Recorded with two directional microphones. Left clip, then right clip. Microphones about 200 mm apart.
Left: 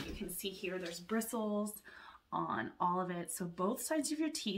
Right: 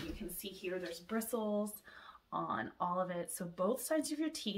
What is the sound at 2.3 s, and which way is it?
Speech, 5° right (ahead or behind).